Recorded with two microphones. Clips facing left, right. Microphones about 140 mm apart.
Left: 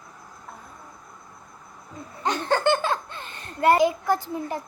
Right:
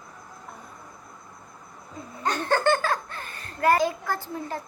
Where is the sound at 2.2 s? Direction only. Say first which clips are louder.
Left 1 dB; 20° left (ahead or behind).